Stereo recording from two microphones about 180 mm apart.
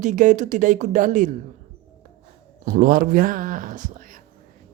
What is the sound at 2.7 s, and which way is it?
Speech, 50° right (ahead or behind).